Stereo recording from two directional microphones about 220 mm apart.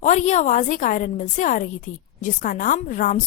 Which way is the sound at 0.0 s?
30° left (ahead or behind).